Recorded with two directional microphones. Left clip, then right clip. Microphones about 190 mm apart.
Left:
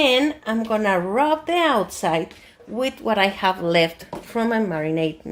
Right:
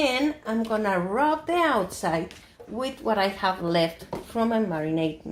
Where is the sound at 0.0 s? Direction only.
35° left (ahead or behind).